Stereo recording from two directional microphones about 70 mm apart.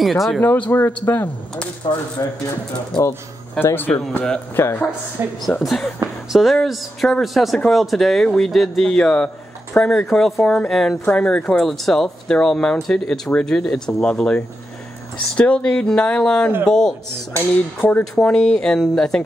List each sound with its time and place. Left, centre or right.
0.0 s speech: centre
0.4 s a man's voice: left
1.8 s speech: left
3.0 s a man's voice: left
5.2 s a woman's voice: right
5.6 s speech: centre
8.9 s speech: centre
11.1 s speech: centre
11.6 s speech: centre
17.7 s a man's voice: left
18.1 s speech: centre